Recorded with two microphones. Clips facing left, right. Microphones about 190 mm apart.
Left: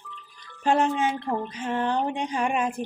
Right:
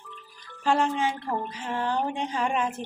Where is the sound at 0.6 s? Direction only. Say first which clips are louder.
Left 2 dB; 20° left (ahead or behind).